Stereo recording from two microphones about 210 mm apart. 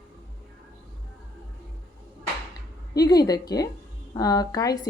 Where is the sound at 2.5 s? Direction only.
20° left (ahead or behind).